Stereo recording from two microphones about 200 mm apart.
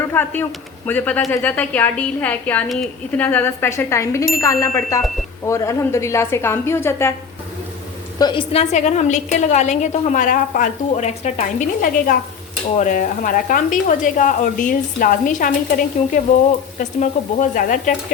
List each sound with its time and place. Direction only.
0.1 s a woman's voice: 10° left (ahead or behind)
8.2 s a woman's voice: 25° left (ahead or behind)
8.7 s a woman's voice: 35° left (ahead or behind)